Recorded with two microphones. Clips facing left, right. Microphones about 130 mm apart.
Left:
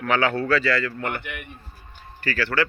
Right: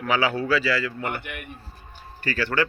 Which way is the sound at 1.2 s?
50° right (ahead or behind).